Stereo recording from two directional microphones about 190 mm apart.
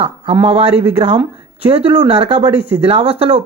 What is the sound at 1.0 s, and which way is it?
A man's voice, 30° right (ahead or behind).